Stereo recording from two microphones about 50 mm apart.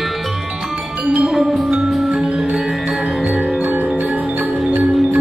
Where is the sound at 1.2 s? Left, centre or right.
Centre.